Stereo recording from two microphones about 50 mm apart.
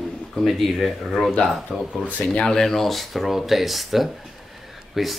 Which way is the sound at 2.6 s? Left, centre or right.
Centre.